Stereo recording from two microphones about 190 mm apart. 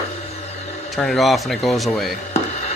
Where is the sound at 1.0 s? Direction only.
Centre (ahead or behind).